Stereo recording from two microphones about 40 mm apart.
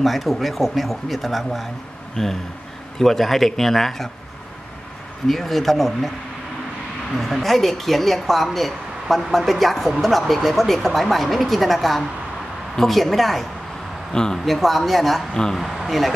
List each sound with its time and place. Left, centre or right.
0.0 s speech: centre
2.2 s a man's voice: centre
5.3 s speech: centre
7.2 s speech: centre
14.1 s a man's voice: centre
14.4 s speech: centre